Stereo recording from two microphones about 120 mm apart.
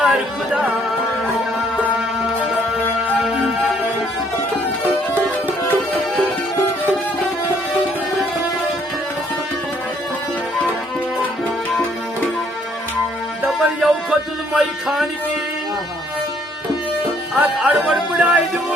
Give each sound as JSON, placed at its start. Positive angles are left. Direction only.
{"t": 0.0, "sound": "music", "side_deg": -10}
{"t": 4.8, "sound": "music", "side_deg": -15}
{"t": 13.5, "sound": "music", "side_deg": -5}
{"t": 17.3, "sound": "speech", "side_deg": -10}